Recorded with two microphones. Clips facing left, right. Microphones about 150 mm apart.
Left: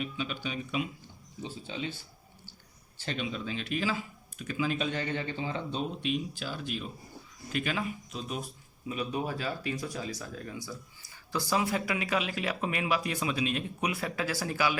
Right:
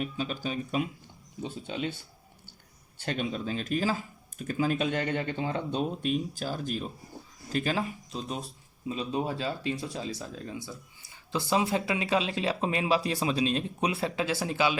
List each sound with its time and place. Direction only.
0.0 s speech: 40° right (ahead or behind)
1.4 s speech: 55° right (ahead or behind)
3.0 s speech: 50° right (ahead or behind); by 14.8 s 20° right (ahead or behind)